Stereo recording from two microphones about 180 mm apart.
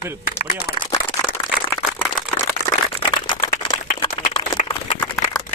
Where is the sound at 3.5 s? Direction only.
25° left (ahead or behind).